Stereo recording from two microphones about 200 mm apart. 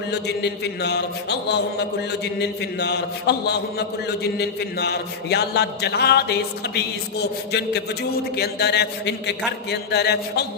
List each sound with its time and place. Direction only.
0.1 s a man's voice: 55° left (ahead or behind)